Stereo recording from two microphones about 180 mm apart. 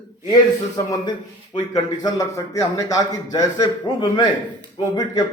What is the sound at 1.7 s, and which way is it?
A man's voice, 20° left (ahead or behind).